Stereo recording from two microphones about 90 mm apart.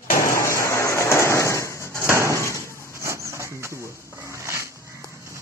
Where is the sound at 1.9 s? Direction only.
30° right (ahead or behind).